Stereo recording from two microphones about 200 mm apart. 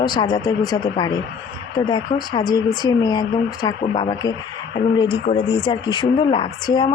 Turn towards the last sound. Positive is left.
turn(degrees=20)  # may be behind; listen again after turning